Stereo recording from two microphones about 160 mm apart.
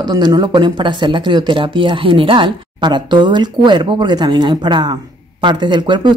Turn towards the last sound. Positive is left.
turn(degrees=-30)  # may be behind; listen again after turning